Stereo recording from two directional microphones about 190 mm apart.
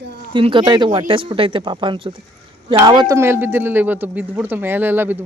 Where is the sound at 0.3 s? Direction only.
25° right (ahead or behind).